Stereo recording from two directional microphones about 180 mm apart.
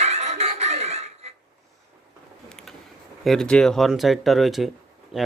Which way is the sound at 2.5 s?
5° left (ahead or behind).